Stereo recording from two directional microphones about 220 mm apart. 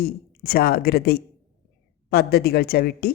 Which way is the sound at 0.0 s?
45° left (ahead or behind).